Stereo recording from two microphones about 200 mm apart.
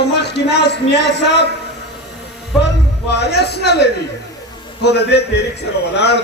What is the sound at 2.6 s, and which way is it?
A man's voice, 60° left (ahead or behind).